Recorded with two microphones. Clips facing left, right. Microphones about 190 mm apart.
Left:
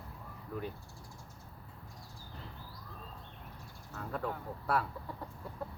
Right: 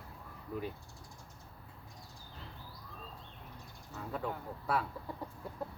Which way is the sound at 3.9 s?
Centre (ahead or behind).